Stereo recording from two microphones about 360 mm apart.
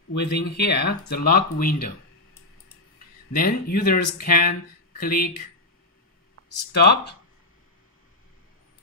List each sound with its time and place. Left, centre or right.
0.2 s speech: left
3.3 s speech: left
6.7 s speech: left